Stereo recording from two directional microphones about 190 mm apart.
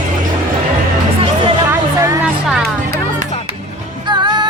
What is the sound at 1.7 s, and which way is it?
Music, 15° right (ahead or behind).